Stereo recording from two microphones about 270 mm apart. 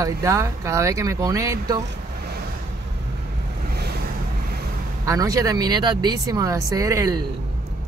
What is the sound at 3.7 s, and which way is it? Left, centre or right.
Vehicle, right.